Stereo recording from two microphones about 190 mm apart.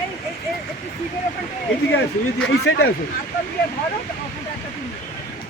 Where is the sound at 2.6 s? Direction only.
55° left (ahead or behind).